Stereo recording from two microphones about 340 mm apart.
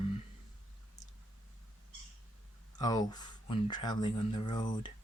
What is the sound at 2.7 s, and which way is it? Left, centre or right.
Speech, centre.